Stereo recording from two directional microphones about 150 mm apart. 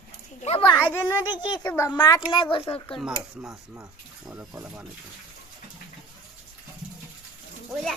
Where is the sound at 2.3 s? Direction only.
35° left (ahead or behind).